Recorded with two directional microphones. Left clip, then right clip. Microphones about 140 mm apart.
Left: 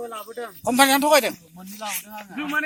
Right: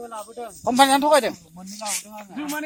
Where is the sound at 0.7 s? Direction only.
50° right (ahead or behind).